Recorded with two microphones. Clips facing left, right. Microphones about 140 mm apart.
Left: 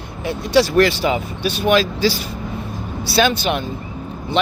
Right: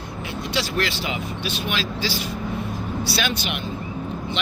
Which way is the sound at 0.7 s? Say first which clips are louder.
Left 10 dB; 40° left (ahead or behind).